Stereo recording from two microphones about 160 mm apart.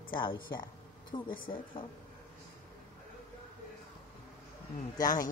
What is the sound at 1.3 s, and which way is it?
Speech, 60° left (ahead or behind).